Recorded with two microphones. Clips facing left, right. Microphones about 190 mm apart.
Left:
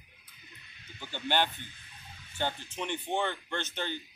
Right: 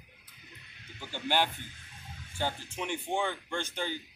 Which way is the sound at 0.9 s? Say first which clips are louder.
Even; 10° right (ahead or behind).